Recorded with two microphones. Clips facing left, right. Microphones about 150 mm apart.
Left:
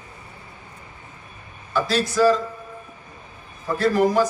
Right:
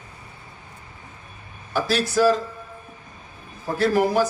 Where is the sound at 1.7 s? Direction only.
65° right (ahead or behind).